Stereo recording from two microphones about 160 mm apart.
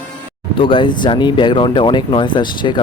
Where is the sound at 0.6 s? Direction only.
30° left (ahead or behind).